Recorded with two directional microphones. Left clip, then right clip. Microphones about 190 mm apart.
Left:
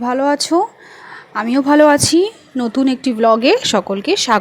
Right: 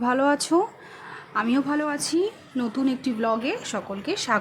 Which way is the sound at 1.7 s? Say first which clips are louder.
Left 15 dB; 40° left (ahead or behind).